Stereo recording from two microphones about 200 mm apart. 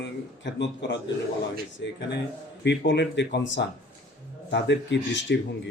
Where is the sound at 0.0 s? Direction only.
60° left (ahead or behind).